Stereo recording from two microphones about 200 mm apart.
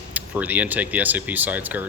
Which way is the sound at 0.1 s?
10° right (ahead or behind).